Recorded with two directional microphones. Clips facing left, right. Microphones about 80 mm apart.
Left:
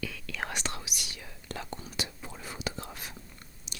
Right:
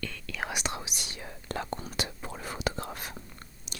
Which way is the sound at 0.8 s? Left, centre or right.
Right.